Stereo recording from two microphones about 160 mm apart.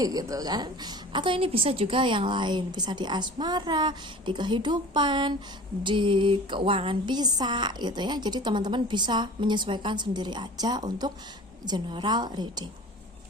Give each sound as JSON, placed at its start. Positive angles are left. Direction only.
{"t": 0.0, "sound": "a woman's voice", "side_deg": -25}